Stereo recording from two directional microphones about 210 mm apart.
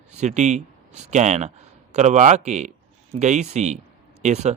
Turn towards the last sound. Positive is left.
turn(degrees=-30)  # may be behind; listen again after turning